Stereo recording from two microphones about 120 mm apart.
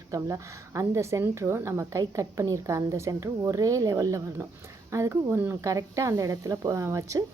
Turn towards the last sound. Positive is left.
turn(degrees=-25)  # may be behind; listen again after turning